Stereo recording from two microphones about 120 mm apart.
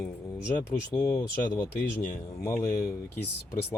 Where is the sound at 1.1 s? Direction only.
35° left (ahead or behind).